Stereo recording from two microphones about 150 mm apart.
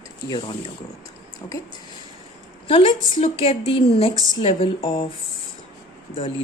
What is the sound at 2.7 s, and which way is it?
Speech, 35° left (ahead or behind).